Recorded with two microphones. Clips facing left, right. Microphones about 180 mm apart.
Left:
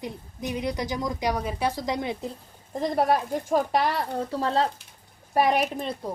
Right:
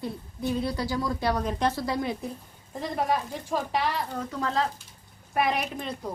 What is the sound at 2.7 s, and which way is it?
Speech, 40° left (ahead or behind).